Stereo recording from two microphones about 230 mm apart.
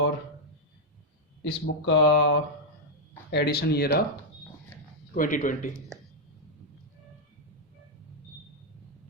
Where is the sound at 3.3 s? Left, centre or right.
Left.